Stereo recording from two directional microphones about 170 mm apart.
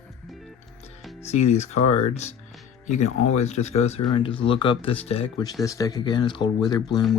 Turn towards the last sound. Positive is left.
turn(degrees=25)  # may be behind; listen again after turning